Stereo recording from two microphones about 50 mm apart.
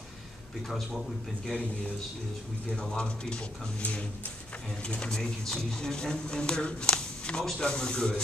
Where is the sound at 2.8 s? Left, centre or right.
Centre.